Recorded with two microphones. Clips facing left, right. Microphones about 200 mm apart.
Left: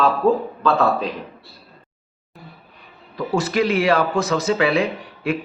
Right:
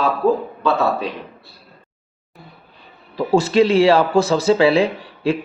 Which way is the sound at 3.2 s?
30° right (ahead or behind).